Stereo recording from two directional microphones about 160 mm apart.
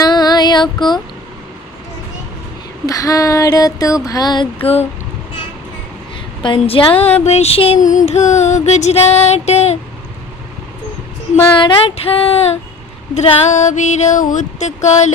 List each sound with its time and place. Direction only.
0.0 s child singing: 25° left (ahead or behind)
2.8 s a sound: 20° left (ahead or behind)
4.6 s female singing: 40° left (ahead or behind)
6.4 s female singing: 30° left (ahead or behind)
7.8 s music: 50° left (ahead or behind)
11.5 s female singing: 30° left (ahead or behind)
13.1 s music: 50° left (ahead or behind)